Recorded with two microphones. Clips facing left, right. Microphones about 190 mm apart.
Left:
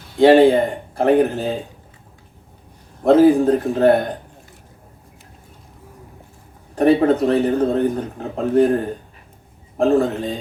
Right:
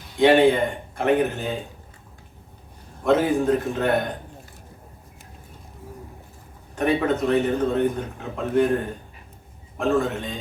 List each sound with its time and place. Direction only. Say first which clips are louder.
0.2 s speech: left 5 dB; 35° left (ahead or behind)
3.0 s speech: left 8 dB; 35° left (ahead or behind)
6.7 s speech: left 7 dB; 35° left (ahead or behind)
9.7 s speech: left 6 dB; 35° left (ahead or behind)